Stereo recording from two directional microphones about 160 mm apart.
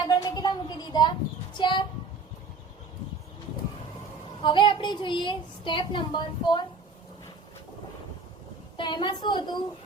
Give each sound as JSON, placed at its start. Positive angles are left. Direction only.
{"t": 0.0, "sound": "a sound", "side_deg": 25}
{"t": 4.4, "sound": "a woman's voice", "side_deg": 30}
{"t": 8.7, "sound": "a woman's voice", "side_deg": 30}